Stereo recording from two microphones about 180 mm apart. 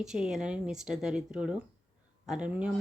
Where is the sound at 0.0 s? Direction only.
Centre (ahead or behind).